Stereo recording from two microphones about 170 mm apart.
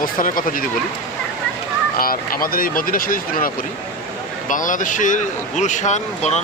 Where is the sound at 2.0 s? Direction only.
60° left (ahead or behind).